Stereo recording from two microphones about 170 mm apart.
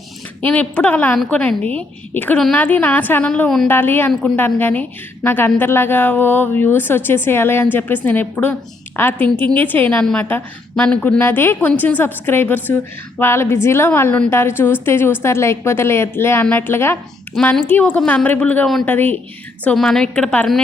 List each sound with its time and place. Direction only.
0.4 s a woman's voice: 10° left (ahead or behind)
17.3 s a woman's voice: 5° left (ahead or behind)